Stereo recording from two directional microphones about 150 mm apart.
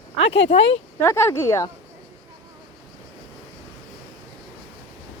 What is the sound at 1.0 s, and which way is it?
Speech, 20° left (ahead or behind).